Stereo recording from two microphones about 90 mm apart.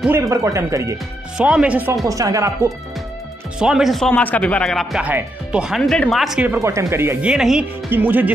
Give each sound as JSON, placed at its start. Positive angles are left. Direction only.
{"t": 0.2, "sound": "speech", "side_deg": -35}
{"t": 1.4, "sound": "speech", "side_deg": -15}
{"t": 2.0, "sound": "speech", "side_deg": -40}
{"t": 3.5, "sound": "speech", "side_deg": -5}
{"t": 4.1, "sound": "speech", "side_deg": 15}
{"t": 5.0, "sound": "speech", "side_deg": -15}
{"t": 5.8, "sound": "speech", "side_deg": 5}
{"t": 6.6, "sound": "speech", "side_deg": -35}
{"t": 7.2, "sound": "speech", "side_deg": -10}
{"t": 7.9, "sound": "speech", "side_deg": -20}